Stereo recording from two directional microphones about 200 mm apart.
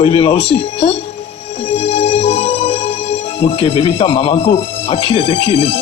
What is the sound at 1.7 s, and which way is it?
Music, 30° left (ahead or behind).